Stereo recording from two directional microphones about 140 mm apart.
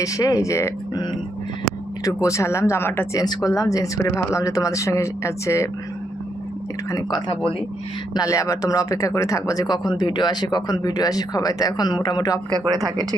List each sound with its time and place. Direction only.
0.0 s speech: 25° left (ahead or behind)
2.0 s speech: 25° left (ahead or behind)
6.9 s speech: 30° left (ahead or behind)
12.5 s speech: 25° right (ahead or behind)